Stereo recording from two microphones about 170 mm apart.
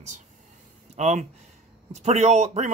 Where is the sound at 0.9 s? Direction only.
40° right (ahead or behind).